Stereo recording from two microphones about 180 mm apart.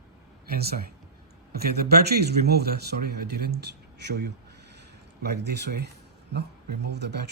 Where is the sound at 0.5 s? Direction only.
60° right (ahead or behind).